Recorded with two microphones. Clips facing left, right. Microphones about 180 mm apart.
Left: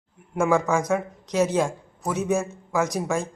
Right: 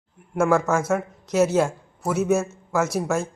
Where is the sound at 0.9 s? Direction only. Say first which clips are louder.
Right 1 dB; 5° right (ahead or behind).